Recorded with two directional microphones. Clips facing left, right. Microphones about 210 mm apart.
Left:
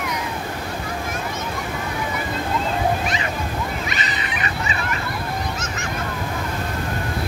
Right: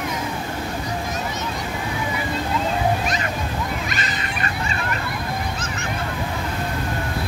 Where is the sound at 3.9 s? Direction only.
45° right (ahead or behind).